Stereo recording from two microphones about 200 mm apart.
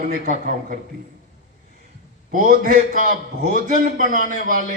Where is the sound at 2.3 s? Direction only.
45° right (ahead or behind).